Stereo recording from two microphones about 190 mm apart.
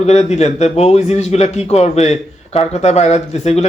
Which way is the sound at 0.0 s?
35° left (ahead or behind).